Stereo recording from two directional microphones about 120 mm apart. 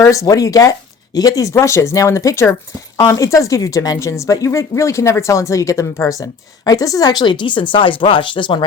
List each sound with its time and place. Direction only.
0.0 s speech: 25° left (ahead or behind); by 8.6 s 45° left (ahead or behind)